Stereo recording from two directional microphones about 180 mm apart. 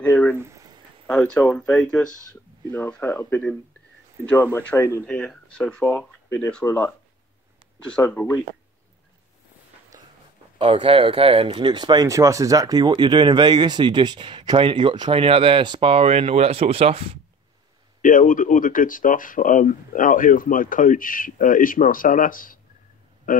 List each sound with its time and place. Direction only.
0.0 s speech: 5° left (ahead or behind)
0.4 s a sound: 15° right (ahead or behind)
1.0 s speech: 5° left (ahead or behind)
4.6 s speech: 15° left (ahead or behind)
5.0 s speech: 5° left (ahead or behind)
7.9 s speech: 10° left (ahead or behind)
10.6 s speech: 30° right (ahead or behind)
18.0 s speech: 50° left (ahead or behind)